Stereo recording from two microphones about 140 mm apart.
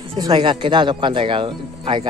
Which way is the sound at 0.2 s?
35° right (ahead or behind).